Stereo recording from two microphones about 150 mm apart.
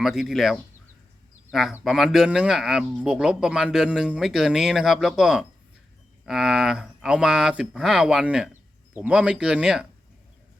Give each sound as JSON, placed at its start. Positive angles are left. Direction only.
{"t": 0.0, "sound": "speech", "side_deg": 0}